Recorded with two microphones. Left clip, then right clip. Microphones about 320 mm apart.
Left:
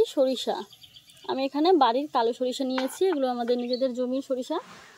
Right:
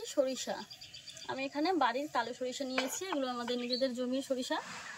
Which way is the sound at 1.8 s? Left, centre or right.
Left.